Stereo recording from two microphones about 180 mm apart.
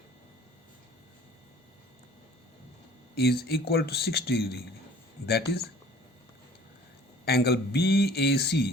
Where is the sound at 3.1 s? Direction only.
60° left (ahead or behind).